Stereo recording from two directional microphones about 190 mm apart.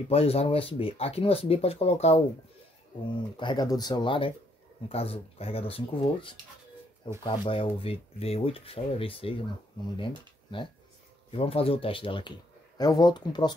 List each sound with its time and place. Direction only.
0.1 s speech: 30° left (ahead or behind)
3.3 s speech: 25° left (ahead or behind)